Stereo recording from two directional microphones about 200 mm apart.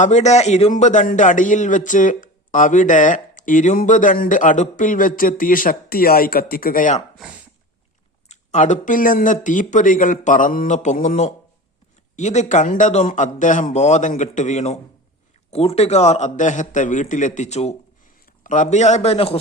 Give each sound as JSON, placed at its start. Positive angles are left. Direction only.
{"t": 0.0, "sound": "a man's voice", "side_deg": 35}
{"t": 8.3, "sound": "a man's voice", "side_deg": 35}